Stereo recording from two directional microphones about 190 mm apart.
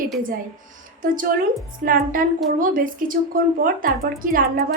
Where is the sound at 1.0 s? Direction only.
45° right (ahead or behind).